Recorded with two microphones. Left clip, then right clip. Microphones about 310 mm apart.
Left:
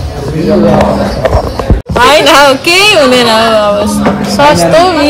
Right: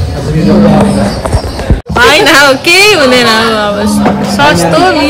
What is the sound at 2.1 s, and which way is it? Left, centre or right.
Speech, centre.